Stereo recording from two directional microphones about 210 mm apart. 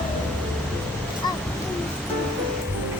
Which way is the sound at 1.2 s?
20° left (ahead or behind).